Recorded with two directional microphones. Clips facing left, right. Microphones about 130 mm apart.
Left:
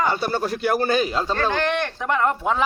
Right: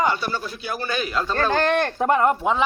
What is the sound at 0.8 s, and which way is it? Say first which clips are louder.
Speech: left 4 dB; 35° left (ahead or behind).